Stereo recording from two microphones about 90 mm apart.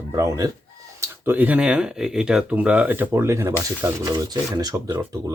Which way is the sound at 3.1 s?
30° right (ahead or behind).